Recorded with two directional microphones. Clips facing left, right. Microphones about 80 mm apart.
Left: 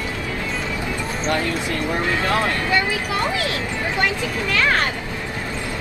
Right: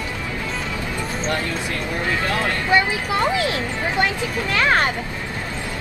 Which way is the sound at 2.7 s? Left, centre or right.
Right.